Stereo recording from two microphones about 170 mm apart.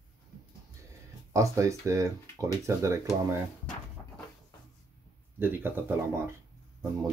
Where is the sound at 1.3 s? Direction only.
20° right (ahead or behind).